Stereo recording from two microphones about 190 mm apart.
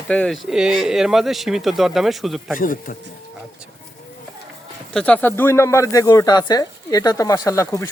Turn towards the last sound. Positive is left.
turn(degrees=15)  # may be behind; listen again after turning